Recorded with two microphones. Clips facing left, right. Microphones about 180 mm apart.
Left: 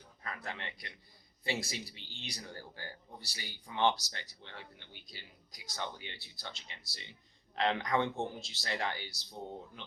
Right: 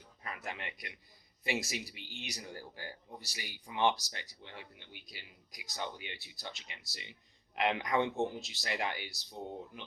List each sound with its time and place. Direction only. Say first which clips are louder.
0.2 s a sound: even; 15° right (ahead or behind)
0.6 s a man's voice: right 1 dB; 30° left (ahead or behind)
1.5 s speech: right 1 dB; 15° right (ahead or behind)